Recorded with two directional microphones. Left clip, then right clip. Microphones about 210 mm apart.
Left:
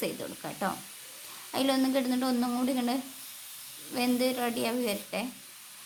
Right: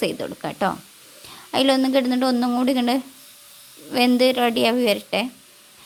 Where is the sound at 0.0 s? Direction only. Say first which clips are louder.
Right 10 dB; 35° right (ahead or behind).